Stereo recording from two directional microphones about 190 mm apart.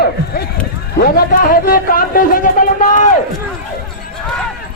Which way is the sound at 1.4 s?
50° left (ahead or behind).